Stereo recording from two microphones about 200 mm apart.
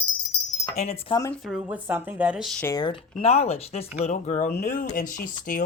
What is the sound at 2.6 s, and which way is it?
Speech, 20° left (ahead or behind).